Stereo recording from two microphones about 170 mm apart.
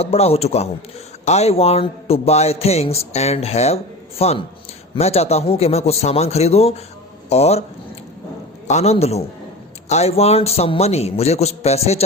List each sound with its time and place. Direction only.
0.0 s a man's voice: 35° left (ahead or behind)
8.6 s a man's voice: 40° left (ahead or behind)